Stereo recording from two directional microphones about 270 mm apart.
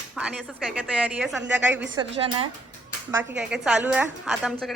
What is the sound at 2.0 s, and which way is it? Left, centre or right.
Speech, centre.